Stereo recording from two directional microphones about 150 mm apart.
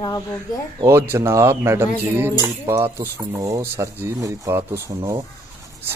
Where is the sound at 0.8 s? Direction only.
15° right (ahead or behind).